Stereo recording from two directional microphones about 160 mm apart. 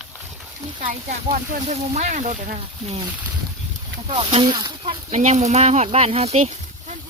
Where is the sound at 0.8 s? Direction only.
50° right (ahead or behind).